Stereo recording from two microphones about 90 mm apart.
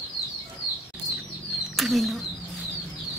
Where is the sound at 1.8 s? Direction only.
Centre (ahead or behind).